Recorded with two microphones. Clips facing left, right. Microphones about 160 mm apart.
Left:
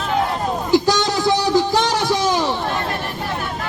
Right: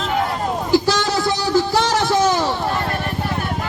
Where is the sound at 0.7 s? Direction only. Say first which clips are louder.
Left 1 dB; 15° left (ahead or behind).